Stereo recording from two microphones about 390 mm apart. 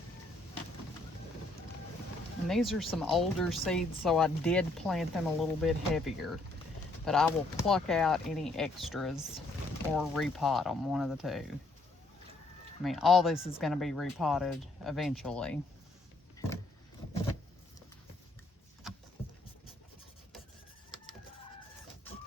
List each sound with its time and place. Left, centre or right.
2.5 s speech: centre
12.8 s speech: centre